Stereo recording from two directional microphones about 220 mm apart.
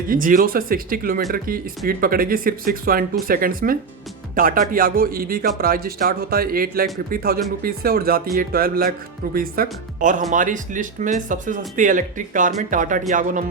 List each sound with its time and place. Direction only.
0.1 s a man's voice: 40° right (ahead or behind)